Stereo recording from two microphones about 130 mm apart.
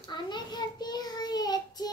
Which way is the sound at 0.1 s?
35° left (ahead or behind).